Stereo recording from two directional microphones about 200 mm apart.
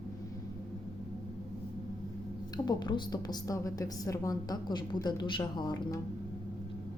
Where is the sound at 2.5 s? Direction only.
20° left (ahead or behind).